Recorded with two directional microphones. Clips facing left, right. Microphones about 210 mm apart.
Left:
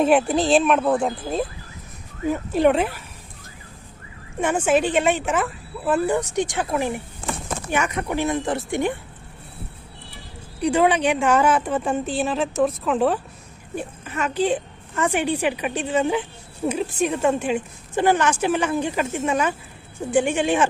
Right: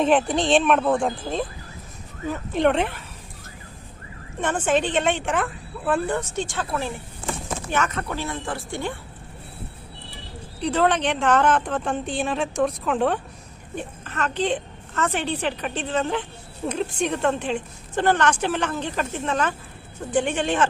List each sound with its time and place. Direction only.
0.0 s speech: 10° left (ahead or behind)
4.4 s a woman's voice: 10° left (ahead or behind)
10.6 s a woman's voice: 10° left (ahead or behind)